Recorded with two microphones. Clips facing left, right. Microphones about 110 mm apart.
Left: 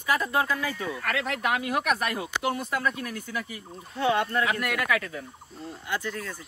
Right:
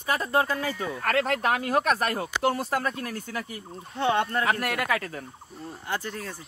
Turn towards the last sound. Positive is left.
turn(degrees=-35)  # may be behind; listen again after turning